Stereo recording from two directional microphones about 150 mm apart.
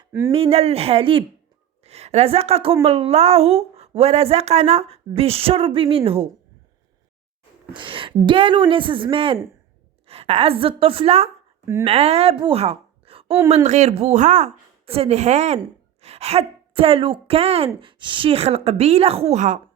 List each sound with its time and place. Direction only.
0.3 s a woman's voice: 40° right (ahead or behind)
7.7 s a woman's voice: 35° right (ahead or behind)
11.6 s speech: 20° right (ahead or behind)
11.9 s a woman's voice: 45° right (ahead or behind)